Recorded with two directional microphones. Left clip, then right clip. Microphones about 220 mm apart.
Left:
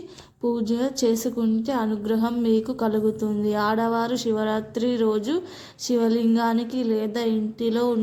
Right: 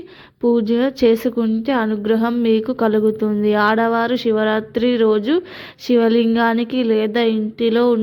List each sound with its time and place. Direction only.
0.4 s a woman's voice: 25° right (ahead or behind)